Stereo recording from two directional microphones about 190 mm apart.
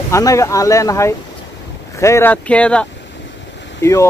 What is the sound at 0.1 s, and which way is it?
Speech, 15° left (ahead or behind).